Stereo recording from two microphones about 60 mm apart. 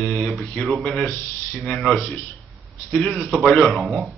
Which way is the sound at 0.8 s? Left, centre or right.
Centre.